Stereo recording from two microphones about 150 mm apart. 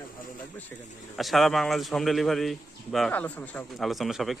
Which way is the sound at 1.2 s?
Centre (ahead or behind).